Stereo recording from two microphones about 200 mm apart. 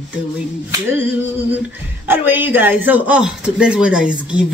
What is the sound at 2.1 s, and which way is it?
Speech, 10° right (ahead or behind).